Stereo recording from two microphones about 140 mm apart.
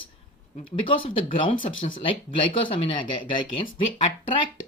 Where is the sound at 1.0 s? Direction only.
40° left (ahead or behind).